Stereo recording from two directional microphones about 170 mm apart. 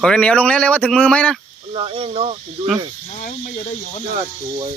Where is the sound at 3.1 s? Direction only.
40° left (ahead or behind).